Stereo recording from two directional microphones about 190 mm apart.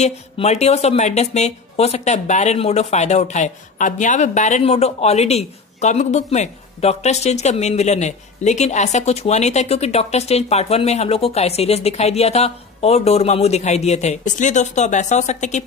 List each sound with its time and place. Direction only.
0.0 s speech: 35° left (ahead or behind)